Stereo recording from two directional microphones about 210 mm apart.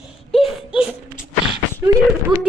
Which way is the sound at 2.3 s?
20° right (ahead or behind).